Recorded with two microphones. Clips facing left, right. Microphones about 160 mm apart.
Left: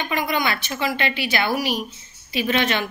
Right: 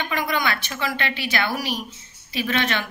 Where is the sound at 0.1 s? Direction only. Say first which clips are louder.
Left 2 dB; 20° left (ahead or behind).